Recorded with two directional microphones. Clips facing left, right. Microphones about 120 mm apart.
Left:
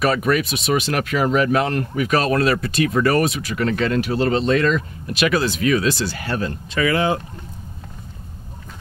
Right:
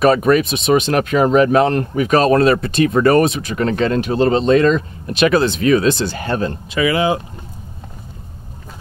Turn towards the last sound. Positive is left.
turn(degrees=-5)  # may be behind; listen again after turning